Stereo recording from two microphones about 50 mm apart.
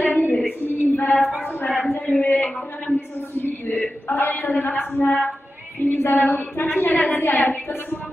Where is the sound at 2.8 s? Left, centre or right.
Left.